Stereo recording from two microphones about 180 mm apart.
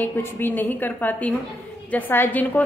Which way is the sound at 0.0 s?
10° left (ahead or behind).